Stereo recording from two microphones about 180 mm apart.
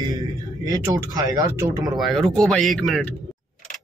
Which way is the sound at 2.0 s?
Centre (ahead or behind).